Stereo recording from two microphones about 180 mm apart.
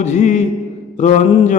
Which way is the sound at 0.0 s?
40° left (ahead or behind).